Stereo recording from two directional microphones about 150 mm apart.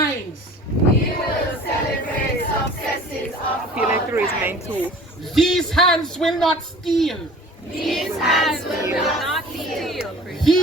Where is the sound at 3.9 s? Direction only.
15° right (ahead or behind).